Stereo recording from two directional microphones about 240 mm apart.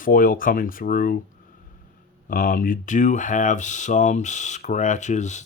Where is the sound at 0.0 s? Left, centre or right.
Left.